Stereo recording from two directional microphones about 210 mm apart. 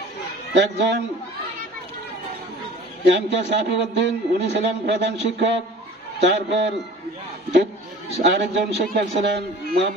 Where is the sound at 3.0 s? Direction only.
55° right (ahead or behind).